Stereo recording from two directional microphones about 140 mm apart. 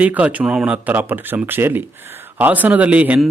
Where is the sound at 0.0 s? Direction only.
10° right (ahead or behind).